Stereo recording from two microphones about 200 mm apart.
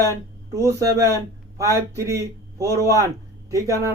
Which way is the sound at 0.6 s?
15° right (ahead or behind).